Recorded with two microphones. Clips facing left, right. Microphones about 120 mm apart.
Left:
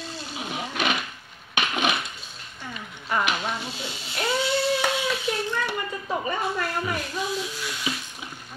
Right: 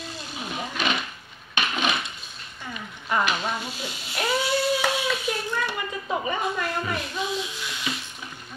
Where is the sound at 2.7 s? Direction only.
5° right (ahead or behind).